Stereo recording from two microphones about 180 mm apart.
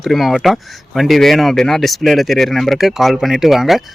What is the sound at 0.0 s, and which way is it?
Speech, centre (ahead or behind).